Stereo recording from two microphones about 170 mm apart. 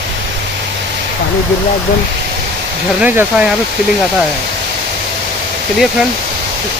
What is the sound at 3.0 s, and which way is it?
Speech, 5° right (ahead or behind).